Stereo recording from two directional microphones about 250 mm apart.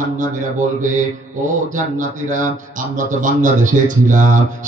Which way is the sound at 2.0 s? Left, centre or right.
Right.